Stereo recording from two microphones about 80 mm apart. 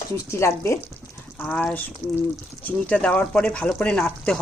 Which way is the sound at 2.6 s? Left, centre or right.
Centre.